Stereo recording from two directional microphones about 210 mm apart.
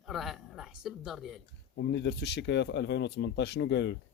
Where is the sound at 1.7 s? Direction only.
55° left (ahead or behind).